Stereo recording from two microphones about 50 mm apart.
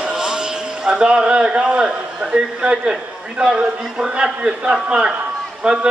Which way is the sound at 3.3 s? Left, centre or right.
Centre.